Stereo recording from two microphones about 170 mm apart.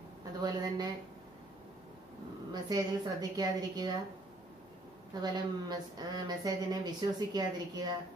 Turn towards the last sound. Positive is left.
turn(degrees=-25)  # may be behind; listen again after turning